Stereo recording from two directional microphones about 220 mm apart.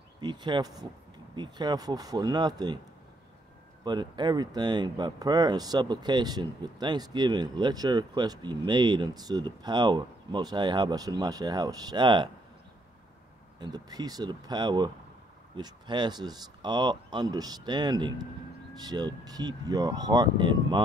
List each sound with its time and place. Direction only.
0.2 s speech: 20° right (ahead or behind)
3.8 s speech: 20° right (ahead or behind)
13.6 s speech: 20° right (ahead or behind)